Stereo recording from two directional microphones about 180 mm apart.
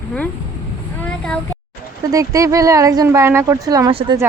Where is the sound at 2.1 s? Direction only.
20° right (ahead or behind).